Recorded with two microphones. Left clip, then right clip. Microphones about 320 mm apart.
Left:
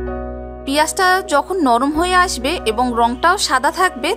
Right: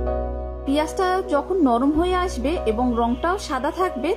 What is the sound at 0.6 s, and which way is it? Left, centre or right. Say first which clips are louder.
A woman's voice: left 7 dB; left.